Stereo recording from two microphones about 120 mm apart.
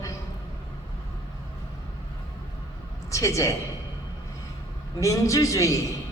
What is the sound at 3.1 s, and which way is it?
Speech, 25° left (ahead or behind).